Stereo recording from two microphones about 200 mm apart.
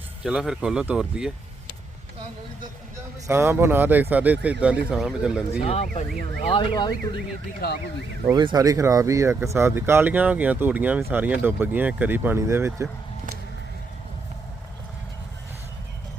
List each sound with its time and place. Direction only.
0.3 s speech: 5° right (ahead or behind)
3.2 s speech: 10° right (ahead or behind)
5.6 s speech: 35° left (ahead or behind)
6.5 s speech: 20° left (ahead or behind)
8.3 s speech: 20° right (ahead or behind)